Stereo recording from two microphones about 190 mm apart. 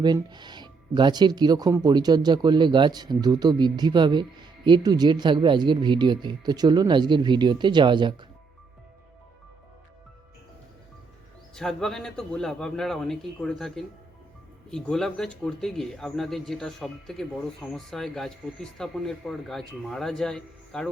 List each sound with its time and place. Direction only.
0.0 s speech: 20° right (ahead or behind)
11.5 s speech: centre (ahead or behind)